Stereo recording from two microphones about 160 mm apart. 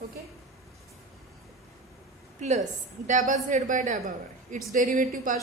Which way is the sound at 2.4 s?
50° right (ahead or behind).